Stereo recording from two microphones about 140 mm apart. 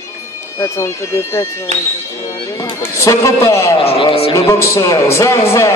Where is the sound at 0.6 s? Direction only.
20° left (ahead or behind).